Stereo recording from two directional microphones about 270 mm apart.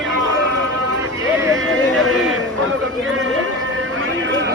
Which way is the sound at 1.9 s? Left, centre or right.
Centre.